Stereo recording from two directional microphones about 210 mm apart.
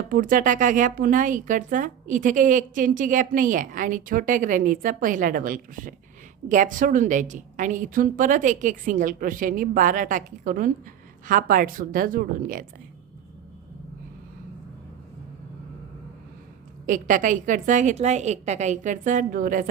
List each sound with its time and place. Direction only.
0.1 s speech: 40° right (ahead or behind)
16.8 s speech: 40° right (ahead or behind)